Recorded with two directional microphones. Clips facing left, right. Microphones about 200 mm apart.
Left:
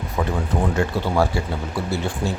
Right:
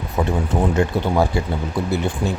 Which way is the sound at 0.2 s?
25° right (ahead or behind).